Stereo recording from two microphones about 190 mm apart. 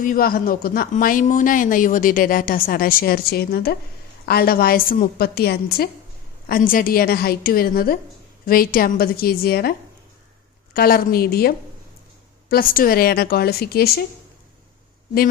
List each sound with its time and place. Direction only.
0.0 s speech: 50° left (ahead or behind)
10.8 s speech: 50° left (ahead or behind)